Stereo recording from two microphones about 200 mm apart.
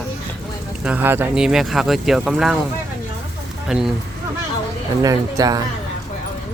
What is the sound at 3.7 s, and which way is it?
Speech, centre (ahead or behind).